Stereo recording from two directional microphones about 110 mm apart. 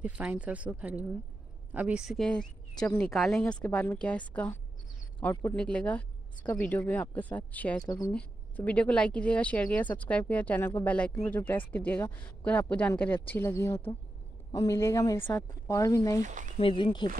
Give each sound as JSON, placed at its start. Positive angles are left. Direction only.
{"t": 0.0, "sound": "speech", "side_deg": -10}
{"t": 2.1, "sound": "a woman's voice", "side_deg": 5}
{"t": 3.6, "sound": "a woman's voice", "side_deg": 15}
{"t": 5.6, "sound": "a woman's voice", "side_deg": 10}
{"t": 7.8, "sound": "a woman's voice", "side_deg": 30}
{"t": 8.1, "sound": "a woman's voice", "side_deg": 10}
{"t": 14.5, "sound": "speech", "side_deg": 35}
{"t": 16.5, "sound": "speech", "side_deg": 50}